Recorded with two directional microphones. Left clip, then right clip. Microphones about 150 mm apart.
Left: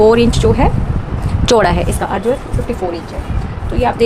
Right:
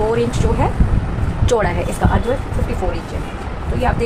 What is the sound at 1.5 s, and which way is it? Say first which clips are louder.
Speech: left 6 dB; 90° left.